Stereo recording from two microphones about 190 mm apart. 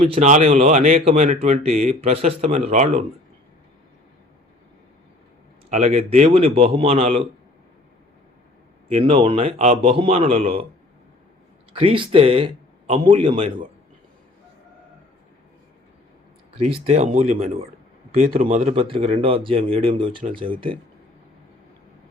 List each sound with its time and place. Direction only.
0.0 s speech: 35° right (ahead or behind)
5.7 s speech: 35° right (ahead or behind)
8.9 s speech: 30° right (ahead or behind)
11.7 s speech: 30° right (ahead or behind)
16.6 s speech: 30° right (ahead or behind)